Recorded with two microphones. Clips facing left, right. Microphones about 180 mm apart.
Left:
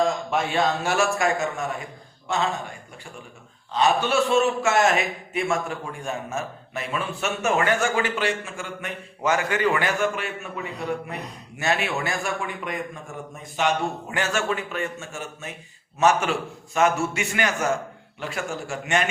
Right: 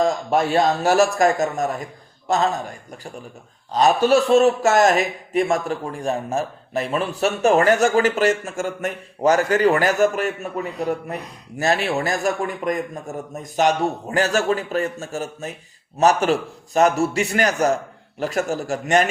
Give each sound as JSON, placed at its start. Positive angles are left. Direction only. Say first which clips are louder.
{"t": 0.3, "sound": "a man's voice", "louder": "right 5 dB", "side_deg": -40}